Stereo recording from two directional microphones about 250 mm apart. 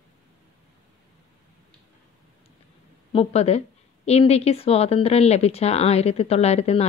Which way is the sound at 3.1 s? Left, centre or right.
Left.